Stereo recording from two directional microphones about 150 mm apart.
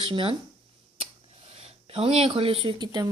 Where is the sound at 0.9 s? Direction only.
40° right (ahead or behind).